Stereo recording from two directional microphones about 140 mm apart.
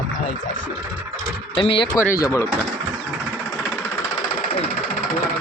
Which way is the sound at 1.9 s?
20° left (ahead or behind).